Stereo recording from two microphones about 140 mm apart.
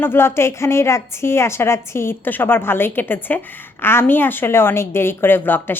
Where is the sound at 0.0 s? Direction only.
15° left (ahead or behind).